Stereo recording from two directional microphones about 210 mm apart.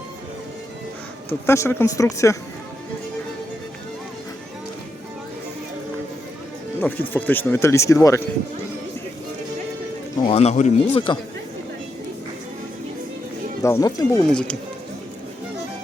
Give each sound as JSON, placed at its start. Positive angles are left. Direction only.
{"t": 1.3, "sound": "speech", "side_deg": 10}
{"t": 6.7, "sound": "speech", "side_deg": 10}
{"t": 10.2, "sound": "speech", "side_deg": 30}
{"t": 13.6, "sound": "speech", "side_deg": 15}
{"t": 14.3, "sound": "speech", "side_deg": 5}